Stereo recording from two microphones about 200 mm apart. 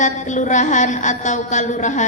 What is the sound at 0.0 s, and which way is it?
A woman's voice, 35° left (ahead or behind).